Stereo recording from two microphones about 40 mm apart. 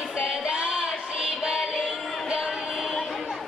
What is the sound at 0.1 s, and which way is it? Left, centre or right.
Music, centre.